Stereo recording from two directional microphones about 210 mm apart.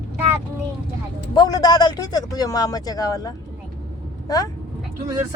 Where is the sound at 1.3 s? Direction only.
20° left (ahead or behind).